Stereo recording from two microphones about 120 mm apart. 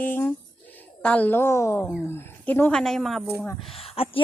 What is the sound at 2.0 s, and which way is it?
Speech, 20° left (ahead or behind).